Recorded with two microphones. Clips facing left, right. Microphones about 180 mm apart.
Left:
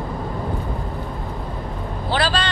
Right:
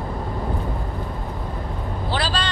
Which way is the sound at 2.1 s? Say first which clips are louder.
Left 4 dB; 65° left (ahead or behind).